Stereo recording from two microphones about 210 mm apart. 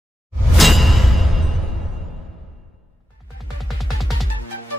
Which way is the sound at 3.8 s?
Centre (ahead or behind).